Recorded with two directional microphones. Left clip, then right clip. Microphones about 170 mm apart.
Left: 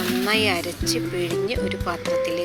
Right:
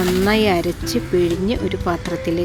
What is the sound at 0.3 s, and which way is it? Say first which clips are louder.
A woman's voice: right 2 dB; 15° left (ahead or behind).